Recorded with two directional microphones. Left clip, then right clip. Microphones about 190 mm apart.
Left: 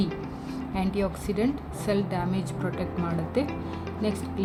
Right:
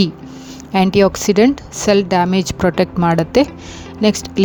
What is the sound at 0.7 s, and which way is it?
A woman's voice, 55° right (ahead or behind).